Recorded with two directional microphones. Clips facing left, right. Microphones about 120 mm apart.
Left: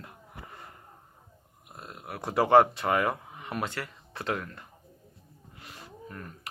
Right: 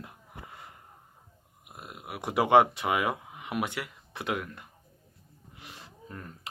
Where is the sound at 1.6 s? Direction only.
15° right (ahead or behind).